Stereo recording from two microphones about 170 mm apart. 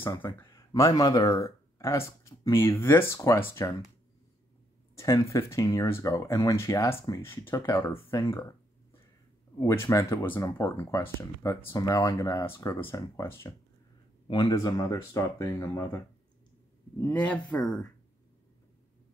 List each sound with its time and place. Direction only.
0.0 s speech: 10° left (ahead or behind)
4.9 s speech: 15° left (ahead or behind)
9.6 s speech: 15° left (ahead or behind)
17.0 s speech: 10° left (ahead or behind)